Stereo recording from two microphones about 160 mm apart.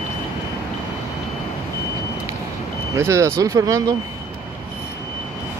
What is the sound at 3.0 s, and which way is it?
Speech, 20° right (ahead or behind).